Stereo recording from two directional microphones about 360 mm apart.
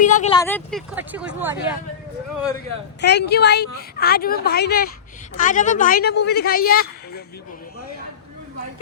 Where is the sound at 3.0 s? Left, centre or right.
Left.